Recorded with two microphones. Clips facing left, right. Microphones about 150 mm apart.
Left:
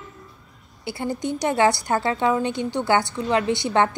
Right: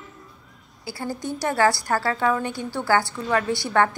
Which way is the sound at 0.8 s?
20° left (ahead or behind).